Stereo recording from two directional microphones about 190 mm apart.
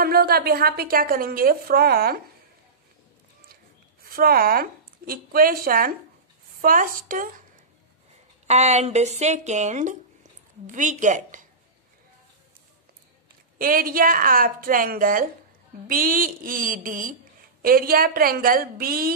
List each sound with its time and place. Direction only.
0.0 s a woman's voice: 55° right (ahead or behind)
4.0 s a woman's voice: 50° right (ahead or behind)
8.5 s speech: 35° right (ahead or behind)
13.6 s a woman's voice: 50° right (ahead or behind)